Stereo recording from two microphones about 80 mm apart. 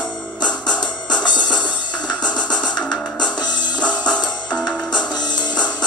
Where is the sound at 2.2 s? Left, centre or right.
Centre.